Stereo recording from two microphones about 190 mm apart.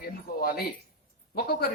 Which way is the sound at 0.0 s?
55° left (ahead or behind).